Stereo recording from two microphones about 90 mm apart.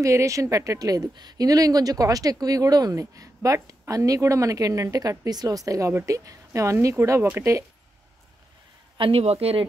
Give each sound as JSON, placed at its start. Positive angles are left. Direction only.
{"t": 0.0, "sound": "speech", "side_deg": -35}
{"t": 8.9, "sound": "a man's voice", "side_deg": -80}